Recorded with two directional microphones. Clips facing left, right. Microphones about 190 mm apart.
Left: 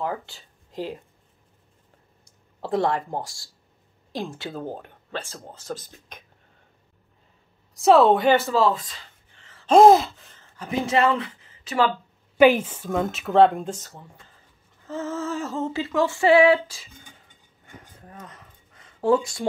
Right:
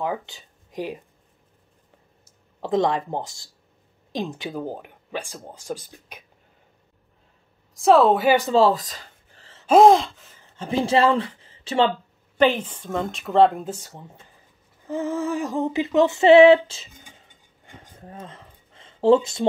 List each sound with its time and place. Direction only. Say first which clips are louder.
0.0 s speech: right 2 dB; 20° right (ahead or behind)
2.6 s a sound: right 2 dB; 20° right (ahead or behind)
4.1 s speech: right 3 dB; 20° right (ahead or behind)
7.7 s speech: even; centre (ahead or behind)
8.5 s a sound: right 3 dB; 35° right (ahead or behind)
9.7 s speech: even; centre (ahead or behind)
10.5 s speech: right 3 dB; 30° right (ahead or behind)
12.4 s speech: left 3 dB; 10° left (ahead or behind); by 14.4 s 20° right (ahead or behind)
14.9 s a sound: right 4 dB; 15° right (ahead or behind)